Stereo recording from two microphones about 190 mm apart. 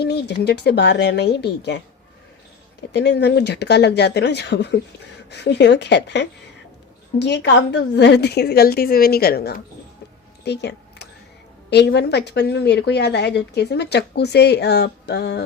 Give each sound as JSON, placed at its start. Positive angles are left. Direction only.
{"t": 0.0, "sound": "a woman's voice", "side_deg": 60}
{"t": 2.9, "sound": "a woman's voice", "side_deg": 65}
{"t": 10.4, "sound": "a sound", "side_deg": 60}
{"t": 11.7, "sound": "a woman's voice", "side_deg": 60}